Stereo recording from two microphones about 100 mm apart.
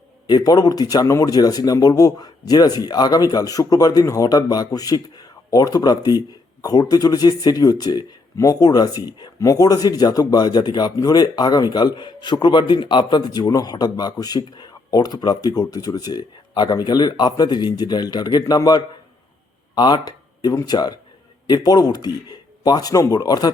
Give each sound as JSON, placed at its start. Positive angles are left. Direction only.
{"t": 0.3, "sound": "speech", "side_deg": 40}